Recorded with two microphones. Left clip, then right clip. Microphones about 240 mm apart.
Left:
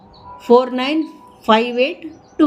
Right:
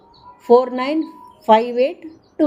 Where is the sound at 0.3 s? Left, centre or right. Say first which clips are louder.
Left 1 dB; centre.